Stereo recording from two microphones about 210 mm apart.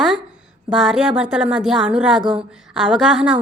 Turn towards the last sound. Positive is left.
turn(degrees=-5)  # may be behind; listen again after turning